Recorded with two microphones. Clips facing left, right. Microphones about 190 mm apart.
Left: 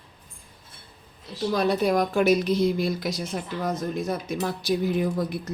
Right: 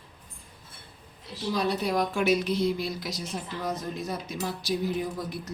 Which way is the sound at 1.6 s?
50° left (ahead or behind).